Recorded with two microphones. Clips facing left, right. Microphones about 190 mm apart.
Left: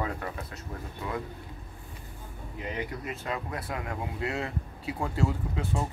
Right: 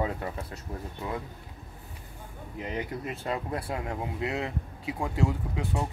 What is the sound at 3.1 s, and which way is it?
Speech, 30° right (ahead or behind).